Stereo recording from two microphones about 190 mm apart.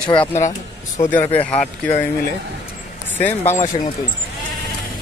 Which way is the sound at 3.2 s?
10° left (ahead or behind).